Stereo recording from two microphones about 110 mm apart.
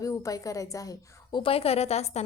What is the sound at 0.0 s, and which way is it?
A woman's voice, 30° left (ahead or behind).